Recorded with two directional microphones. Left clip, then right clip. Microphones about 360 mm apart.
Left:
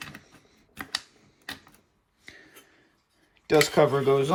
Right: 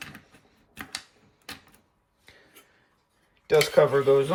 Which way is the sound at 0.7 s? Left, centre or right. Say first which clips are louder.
Left 1 dB; centre.